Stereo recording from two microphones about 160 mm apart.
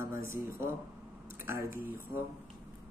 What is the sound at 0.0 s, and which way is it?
Speech, 15° right (ahead or behind).